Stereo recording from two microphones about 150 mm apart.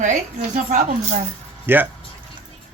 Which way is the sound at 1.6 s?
10° right (ahead or behind).